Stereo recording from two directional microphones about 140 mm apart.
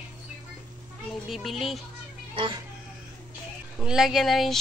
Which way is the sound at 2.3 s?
35° right (ahead or behind).